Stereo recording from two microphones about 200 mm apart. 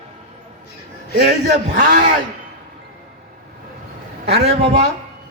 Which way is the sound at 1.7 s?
40° right (ahead or behind).